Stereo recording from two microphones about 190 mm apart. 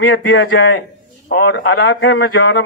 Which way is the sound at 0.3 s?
90° left.